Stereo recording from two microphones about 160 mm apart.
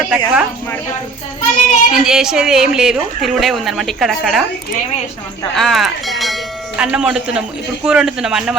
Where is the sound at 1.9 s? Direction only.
5° right (ahead or behind).